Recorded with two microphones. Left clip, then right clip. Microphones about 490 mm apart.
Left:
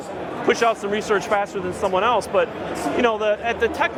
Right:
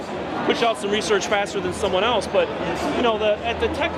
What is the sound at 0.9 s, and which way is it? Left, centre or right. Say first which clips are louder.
Speech: even; centre.